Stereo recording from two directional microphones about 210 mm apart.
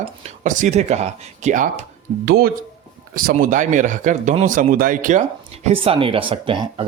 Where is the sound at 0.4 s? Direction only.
35° right (ahead or behind).